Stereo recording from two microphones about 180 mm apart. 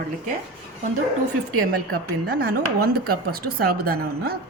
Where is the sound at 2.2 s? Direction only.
55° right (ahead or behind).